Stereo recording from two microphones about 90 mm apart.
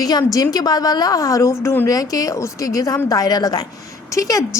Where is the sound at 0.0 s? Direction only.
40° left (ahead or behind).